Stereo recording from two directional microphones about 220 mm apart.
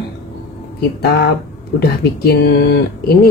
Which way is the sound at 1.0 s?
50° left (ahead or behind).